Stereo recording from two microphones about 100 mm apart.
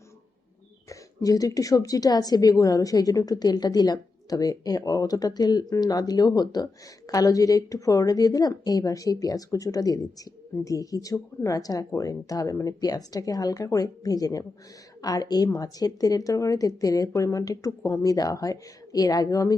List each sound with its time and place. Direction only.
0.9 s a woman's voice: 35° left (ahead or behind)